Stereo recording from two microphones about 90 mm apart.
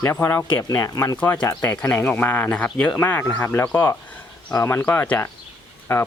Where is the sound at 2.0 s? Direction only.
20° left (ahead or behind).